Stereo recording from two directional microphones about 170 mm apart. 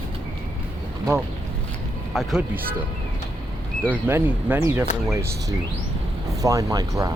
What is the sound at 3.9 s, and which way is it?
Speech, 10° right (ahead or behind).